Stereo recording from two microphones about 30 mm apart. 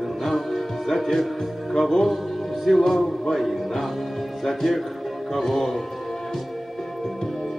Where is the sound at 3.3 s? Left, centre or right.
Left.